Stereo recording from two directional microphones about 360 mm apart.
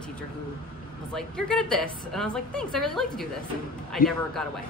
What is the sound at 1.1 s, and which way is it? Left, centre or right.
A woman's voice, centre.